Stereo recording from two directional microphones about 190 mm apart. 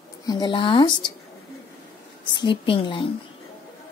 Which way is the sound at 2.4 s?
25° left (ahead or behind).